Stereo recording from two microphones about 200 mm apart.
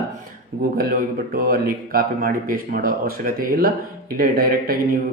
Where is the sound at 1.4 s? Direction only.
45° right (ahead or behind).